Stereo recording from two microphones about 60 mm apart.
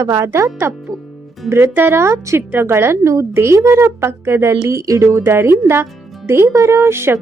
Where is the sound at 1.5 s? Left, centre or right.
Right.